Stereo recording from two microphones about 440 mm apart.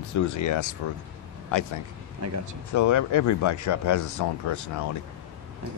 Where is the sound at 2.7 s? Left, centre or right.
Left.